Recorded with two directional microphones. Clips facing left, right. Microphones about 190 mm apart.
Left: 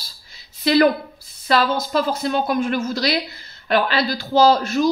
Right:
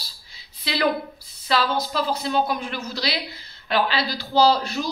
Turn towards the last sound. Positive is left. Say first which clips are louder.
# left 4 dB
turn(degrees=45)  # may be behind; listen again after turning